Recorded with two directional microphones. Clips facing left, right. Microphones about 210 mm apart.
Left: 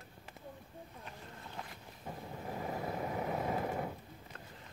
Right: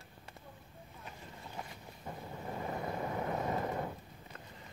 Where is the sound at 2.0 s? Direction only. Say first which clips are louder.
Even; 5° left (ahead or behind).